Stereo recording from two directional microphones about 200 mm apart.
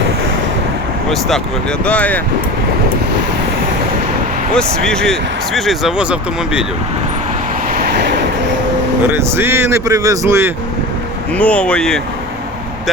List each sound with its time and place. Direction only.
1.8 s speech: 5° left (ahead or behind)
4.5 s speech: 5° left (ahead or behind)
7.8 s vehicle: 55° right (ahead or behind)
9.1 s speech: 10° right (ahead or behind)
11.3 s speech: 5° left (ahead or behind)